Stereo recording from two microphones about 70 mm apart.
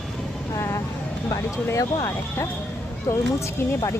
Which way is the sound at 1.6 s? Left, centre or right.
Left.